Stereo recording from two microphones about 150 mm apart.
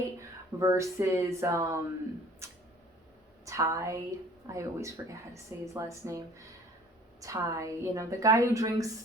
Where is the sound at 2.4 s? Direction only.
20° right (ahead or behind).